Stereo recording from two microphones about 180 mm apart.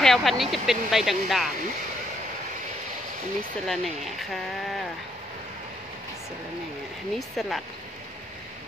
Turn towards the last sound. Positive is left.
turn(degrees=0)  # may be behind; listen again after turning